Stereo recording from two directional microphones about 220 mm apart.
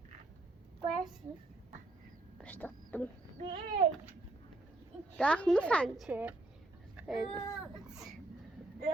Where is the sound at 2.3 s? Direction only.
5° left (ahead or behind).